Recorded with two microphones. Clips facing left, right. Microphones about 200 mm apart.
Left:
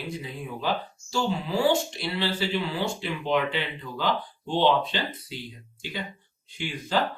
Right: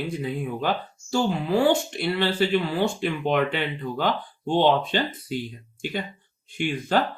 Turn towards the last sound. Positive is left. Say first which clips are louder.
# right 6 dB
turn(degrees=-55)  # may be behind; listen again after turning